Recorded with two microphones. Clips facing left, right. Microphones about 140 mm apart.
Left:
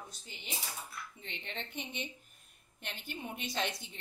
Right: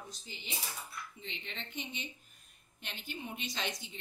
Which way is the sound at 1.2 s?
55° left (ahead or behind).